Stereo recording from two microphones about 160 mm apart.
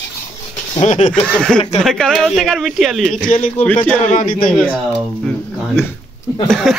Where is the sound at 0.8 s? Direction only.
50° left (ahead or behind).